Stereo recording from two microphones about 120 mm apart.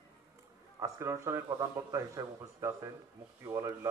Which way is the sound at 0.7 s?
25° right (ahead or behind).